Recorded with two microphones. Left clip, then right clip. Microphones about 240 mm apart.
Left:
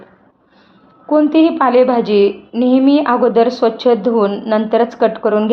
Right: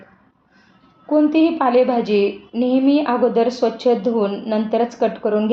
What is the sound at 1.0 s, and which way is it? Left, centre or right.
A woman's voice, centre.